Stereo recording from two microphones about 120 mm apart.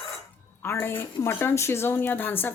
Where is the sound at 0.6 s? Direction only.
20° left (ahead or behind).